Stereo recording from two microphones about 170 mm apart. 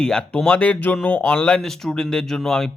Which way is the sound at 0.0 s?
5° left (ahead or behind).